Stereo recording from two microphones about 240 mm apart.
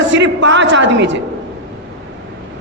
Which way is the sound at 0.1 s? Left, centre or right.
Right.